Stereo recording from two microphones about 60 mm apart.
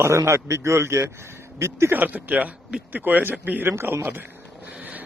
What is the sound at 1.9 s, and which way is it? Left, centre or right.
Speech, right.